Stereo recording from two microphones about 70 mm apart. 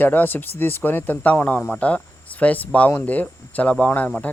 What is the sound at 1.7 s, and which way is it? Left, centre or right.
Speech, centre.